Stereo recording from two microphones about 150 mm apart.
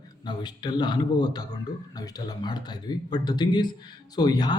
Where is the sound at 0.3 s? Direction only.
30° left (ahead or behind).